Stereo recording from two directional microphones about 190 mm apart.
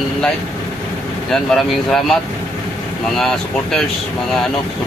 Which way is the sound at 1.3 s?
Centre (ahead or behind).